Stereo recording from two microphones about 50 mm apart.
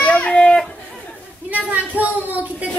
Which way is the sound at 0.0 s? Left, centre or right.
Centre.